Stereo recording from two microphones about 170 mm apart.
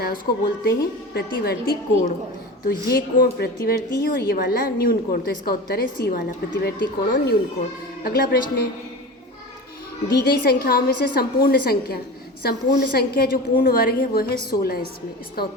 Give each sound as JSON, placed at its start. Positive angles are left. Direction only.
{"t": 1.1, "sound": "a woman's voice", "side_deg": 65}
{"t": 10.1, "sound": "a woman's voice", "side_deg": 65}